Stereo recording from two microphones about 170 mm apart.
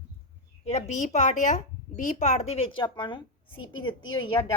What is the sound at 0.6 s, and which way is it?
Speech, 40° left (ahead or behind).